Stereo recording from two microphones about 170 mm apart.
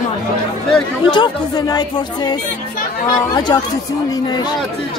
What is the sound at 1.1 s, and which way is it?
Speech, 25° left (ahead or behind).